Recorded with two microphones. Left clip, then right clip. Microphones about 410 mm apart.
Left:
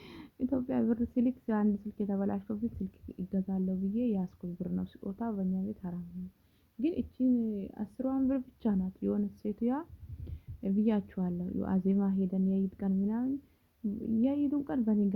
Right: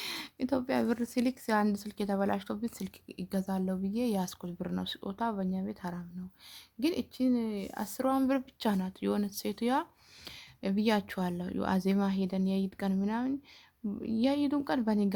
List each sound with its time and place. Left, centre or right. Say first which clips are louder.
0.0 s speech: right 3 dB; centre